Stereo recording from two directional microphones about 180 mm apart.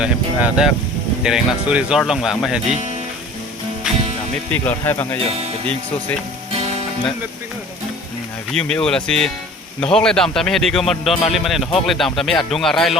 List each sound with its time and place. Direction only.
0.0 s speech: 5° right (ahead or behind)
4.5 s speech: 10° left (ahead or behind)
8.5 s speech: 5° left (ahead or behind)